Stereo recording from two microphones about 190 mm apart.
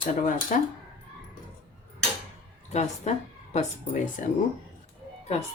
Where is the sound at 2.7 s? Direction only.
35° left (ahead or behind).